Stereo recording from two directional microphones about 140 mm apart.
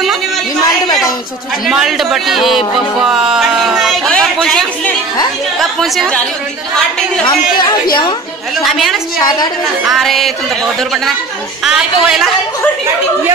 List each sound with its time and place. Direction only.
1.7 s speech: centre (ahead or behind)
7.2 s speech: 30° left (ahead or behind)
8.6 s speech: centre (ahead or behind)
9.2 s a woman's voice: 30° left (ahead or behind)
9.8 s speech: centre (ahead or behind)
11.6 s speech: 5° right (ahead or behind)